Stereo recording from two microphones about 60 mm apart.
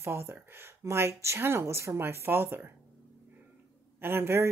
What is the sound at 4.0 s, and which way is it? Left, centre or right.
Speech, right.